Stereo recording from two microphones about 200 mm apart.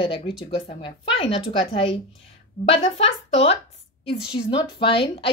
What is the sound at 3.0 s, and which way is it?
Speech, 65° left (ahead or behind).